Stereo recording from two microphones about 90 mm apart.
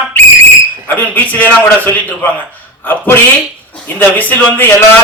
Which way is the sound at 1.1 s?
20° left (ahead or behind).